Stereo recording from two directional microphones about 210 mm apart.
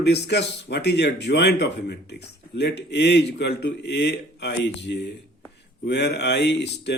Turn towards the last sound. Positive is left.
turn(degrees=55)  # may be behind; listen again after turning